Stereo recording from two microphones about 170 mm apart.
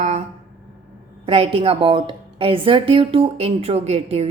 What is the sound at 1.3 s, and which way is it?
A woman's voice, 35° right (ahead or behind).